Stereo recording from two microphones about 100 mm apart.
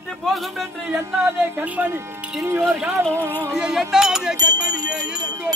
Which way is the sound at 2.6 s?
5° right (ahead or behind).